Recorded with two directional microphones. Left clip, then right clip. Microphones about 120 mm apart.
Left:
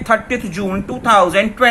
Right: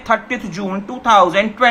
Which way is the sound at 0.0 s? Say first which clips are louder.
Left 2 dB; 45° left (ahead or behind).